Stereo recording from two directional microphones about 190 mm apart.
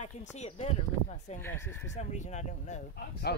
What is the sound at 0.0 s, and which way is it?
Speech, 35° left (ahead or behind).